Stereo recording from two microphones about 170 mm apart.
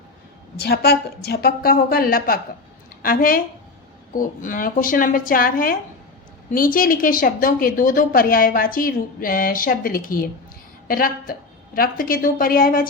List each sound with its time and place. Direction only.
0.5 s a woman's voice: 70° left (ahead or behind)